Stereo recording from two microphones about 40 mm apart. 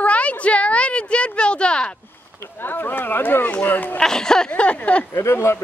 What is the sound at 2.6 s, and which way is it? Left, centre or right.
Speech, left.